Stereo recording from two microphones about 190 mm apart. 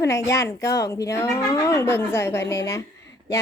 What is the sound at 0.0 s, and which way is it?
A woman's voice, 15° left (ahead or behind).